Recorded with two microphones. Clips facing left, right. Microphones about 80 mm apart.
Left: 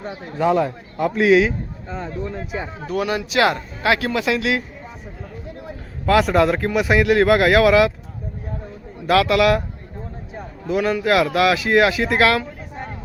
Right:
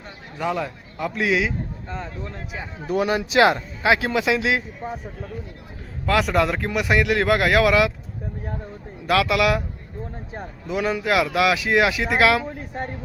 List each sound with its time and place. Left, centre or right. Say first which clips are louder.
0.4 s a man's voice: left 7 dB; centre
2.9 s speech: right 1 dB; right
3.8 s speech: even; centre
6.1 s speech: left 4 dB; centre
9.0 s speech: left 4 dB; centre
10.7 s speech: left 4 dB; centre